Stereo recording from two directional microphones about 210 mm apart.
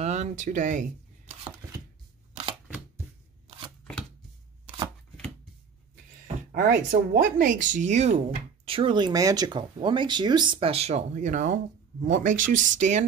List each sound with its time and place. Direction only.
0.0 s speech: 35° right (ahead or behind)
3.4 s chopping: 25° right (ahead or behind)
6.2 s speech: 40° right (ahead or behind)